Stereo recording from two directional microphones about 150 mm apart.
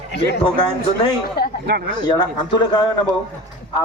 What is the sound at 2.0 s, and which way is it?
Speech, 30° left (ahead or behind).